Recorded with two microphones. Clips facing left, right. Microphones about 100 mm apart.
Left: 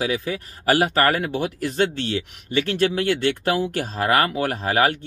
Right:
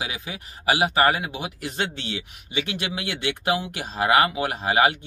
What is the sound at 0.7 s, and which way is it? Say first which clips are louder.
Speech: left 2 dB; 50° left (ahead or behind).